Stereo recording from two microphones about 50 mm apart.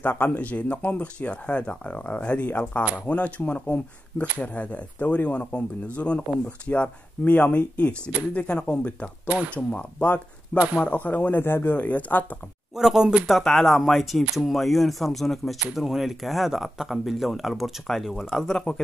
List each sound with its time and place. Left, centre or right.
0.0 s speech: left
11.7 s speech: left
12.7 s speech: centre
13.3 s speech: centre